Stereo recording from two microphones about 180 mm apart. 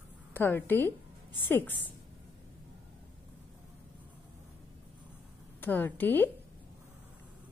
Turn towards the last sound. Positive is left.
turn(degrees=10)  # may be behind; listen again after turning